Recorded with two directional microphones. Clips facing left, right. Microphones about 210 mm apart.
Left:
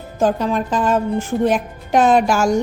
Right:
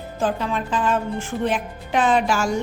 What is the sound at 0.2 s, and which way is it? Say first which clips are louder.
A woman's voice: left 6 dB; 40° left (ahead or behind).